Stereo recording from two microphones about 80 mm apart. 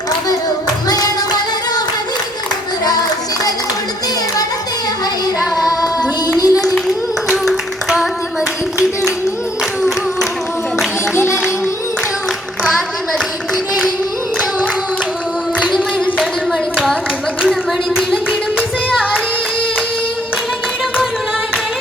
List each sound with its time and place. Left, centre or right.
5.4 s child singing: centre
6.3 s a sound: left
6.7 s singing: centre
11.1 s music: left
15.7 s a sound: centre
17.4 s clapping: centre